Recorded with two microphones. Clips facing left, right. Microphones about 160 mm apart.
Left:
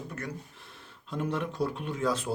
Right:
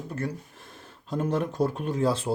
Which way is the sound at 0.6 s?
45° right (ahead or behind).